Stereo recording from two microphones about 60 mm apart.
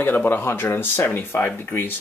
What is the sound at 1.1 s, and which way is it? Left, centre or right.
Speech, left.